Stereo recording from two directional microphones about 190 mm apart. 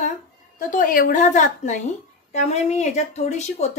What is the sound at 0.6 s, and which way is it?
A woman's voice, 45° left (ahead or behind).